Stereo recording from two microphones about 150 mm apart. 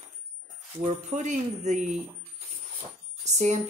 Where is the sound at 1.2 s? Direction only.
55° right (ahead or behind).